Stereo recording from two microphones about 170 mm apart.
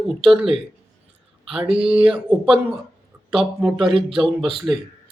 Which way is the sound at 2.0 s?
5° right (ahead or behind).